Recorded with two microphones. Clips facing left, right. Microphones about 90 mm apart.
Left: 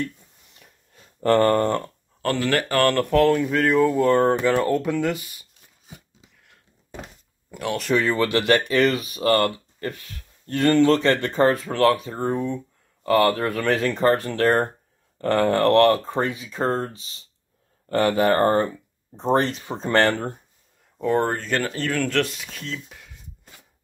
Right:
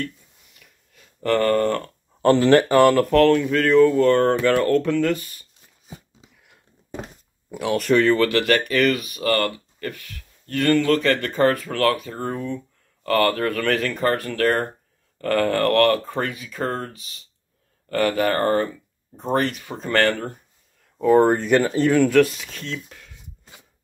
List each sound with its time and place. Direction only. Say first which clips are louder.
0.6 s a sound: left 2 dB; 30° left (ahead or behind)
2.2 s speech: right 8 dB; 30° right (ahead or behind)
2.8 s speech: right 5 dB; 10° right (ahead or behind)
3.1 s speech: right 2 dB; 10° left (ahead or behind)
7.5 s speech: right 3 dB; centre (ahead or behind)
8.0 s speech: right 4 dB; 15° left (ahead or behind)
21.0 s speech: right 6 dB; 5° right (ahead or behind)
21.3 s speech: right 7 dB; 15° right (ahead or behind); by 23.0 s 5° left (ahead or behind)